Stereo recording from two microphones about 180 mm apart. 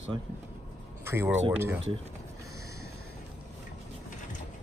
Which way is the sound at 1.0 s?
15° right (ahead or behind).